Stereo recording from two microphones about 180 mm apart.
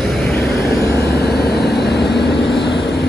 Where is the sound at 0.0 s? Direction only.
Centre (ahead or behind).